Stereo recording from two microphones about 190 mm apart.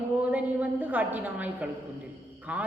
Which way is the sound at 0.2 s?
10° right (ahead or behind).